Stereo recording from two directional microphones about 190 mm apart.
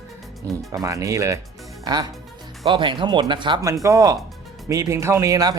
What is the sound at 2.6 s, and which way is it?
Speech, 25° right (ahead or behind).